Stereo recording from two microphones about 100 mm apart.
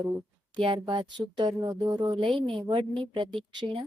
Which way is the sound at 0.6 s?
55° right (ahead or behind).